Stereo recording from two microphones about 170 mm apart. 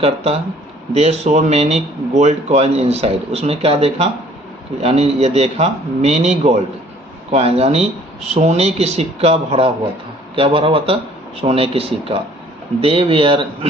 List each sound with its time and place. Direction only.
0.9 s speech: 40° right (ahead or behind)